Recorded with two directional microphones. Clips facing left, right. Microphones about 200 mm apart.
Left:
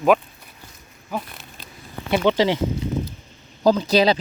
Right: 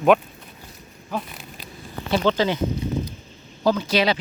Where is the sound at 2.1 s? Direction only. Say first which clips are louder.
Left 2 dB; 20° left (ahead or behind).